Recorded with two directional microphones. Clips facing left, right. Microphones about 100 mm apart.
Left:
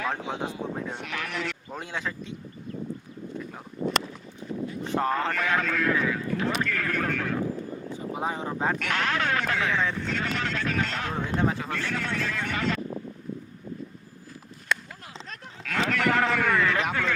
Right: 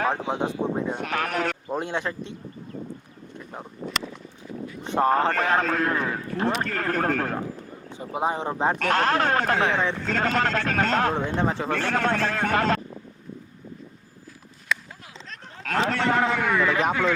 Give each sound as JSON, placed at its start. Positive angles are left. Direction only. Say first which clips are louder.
{"t": 0.1, "sound": "a man's voice", "louder": "right 5 dB", "side_deg": -20}
{"t": 0.9, "sound": "a man's voice", "louder": "right 7 dB", "side_deg": -45}
{"t": 1.6, "sound": "a man's voice", "louder": "right 6 dB", "side_deg": -25}
{"t": 4.8, "sound": "a man's voice", "louder": "right 4 dB", "side_deg": -20}
{"t": 5.0, "sound": "a man's voice", "louder": "right 7 dB", "side_deg": -40}
{"t": 7.9, "sound": "a man's voice", "louder": "right 5 dB", "side_deg": -20}
{"t": 8.8, "sound": "a man's voice", "louder": "right 6 dB", "side_deg": -40}
{"t": 11.1, "sound": "a man's voice", "louder": "right 2 dB", "side_deg": -25}
{"t": 11.7, "sound": "a man's voice", "louder": "right 7 dB", "side_deg": -55}
{"t": 14.7, "sound": "a sound", "louder": "even", "side_deg": 0}
{"t": 15.6, "sound": "a man's voice", "louder": "right 2 dB", "side_deg": -35}